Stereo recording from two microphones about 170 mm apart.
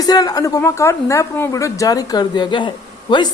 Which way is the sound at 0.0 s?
20° left (ahead or behind).